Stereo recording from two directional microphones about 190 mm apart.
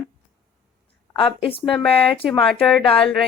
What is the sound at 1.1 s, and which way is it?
Speech, 30° left (ahead or behind).